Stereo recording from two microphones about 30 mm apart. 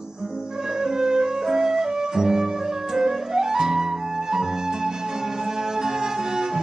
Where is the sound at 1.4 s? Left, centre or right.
Centre.